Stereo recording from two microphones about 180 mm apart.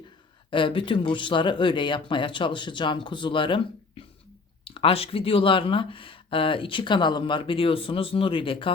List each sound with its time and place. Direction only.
0.5 s speech: 30° left (ahead or behind)